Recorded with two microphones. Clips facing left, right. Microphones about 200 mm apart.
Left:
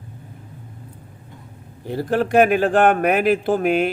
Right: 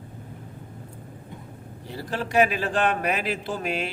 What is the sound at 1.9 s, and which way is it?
A man's voice, 55° left (ahead or behind).